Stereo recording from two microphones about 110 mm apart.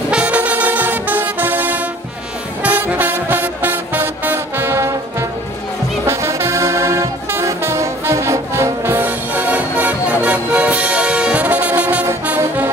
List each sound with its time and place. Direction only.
0.1 s music: 10° right (ahead or behind)
6.0 s music: 25° right (ahead or behind)